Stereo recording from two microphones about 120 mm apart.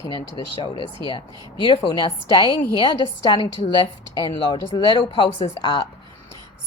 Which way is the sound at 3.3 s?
40° left (ahead or behind).